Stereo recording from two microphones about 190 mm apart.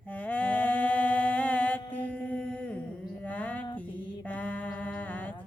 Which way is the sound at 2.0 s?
5° left (ahead or behind).